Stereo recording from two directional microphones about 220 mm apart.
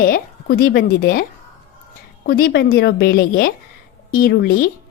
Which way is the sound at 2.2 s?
40° left (ahead or behind).